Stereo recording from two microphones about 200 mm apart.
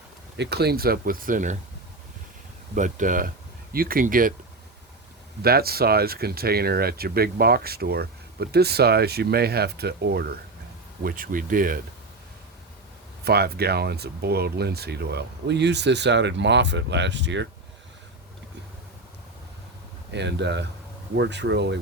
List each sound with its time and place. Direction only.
0.3 s speech: 55° right (ahead or behind)
2.7 s speech: 40° right (ahead or behind)
5.4 s speech: 50° right (ahead or behind)
13.2 s speech: 50° right (ahead or behind)
20.1 s speech: 60° right (ahead or behind)